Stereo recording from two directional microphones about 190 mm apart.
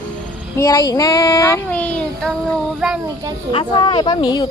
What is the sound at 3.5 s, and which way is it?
Speech, 25° left (ahead or behind).